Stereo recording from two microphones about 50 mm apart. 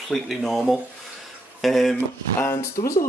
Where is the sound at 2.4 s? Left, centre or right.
Left.